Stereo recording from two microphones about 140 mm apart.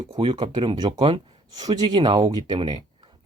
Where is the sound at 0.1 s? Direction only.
35° right (ahead or behind).